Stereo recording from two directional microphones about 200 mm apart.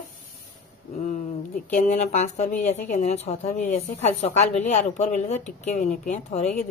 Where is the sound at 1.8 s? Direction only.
35° left (ahead or behind).